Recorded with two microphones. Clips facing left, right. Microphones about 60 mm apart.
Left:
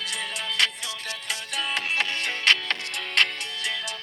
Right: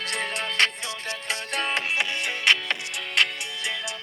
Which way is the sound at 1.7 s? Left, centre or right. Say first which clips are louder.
Left 2 dB; centre.